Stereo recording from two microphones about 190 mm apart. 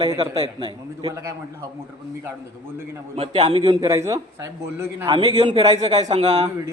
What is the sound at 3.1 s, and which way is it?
Speech, 30° right (ahead or behind).